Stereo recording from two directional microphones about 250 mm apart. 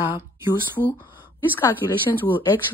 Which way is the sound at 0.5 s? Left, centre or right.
Centre.